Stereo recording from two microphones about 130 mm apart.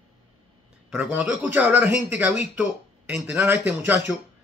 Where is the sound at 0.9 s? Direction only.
10° right (ahead or behind).